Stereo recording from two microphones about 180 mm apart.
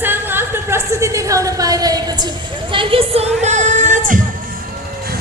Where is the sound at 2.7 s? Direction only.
30° right (ahead or behind); by 4.2 s 45° right (ahead or behind).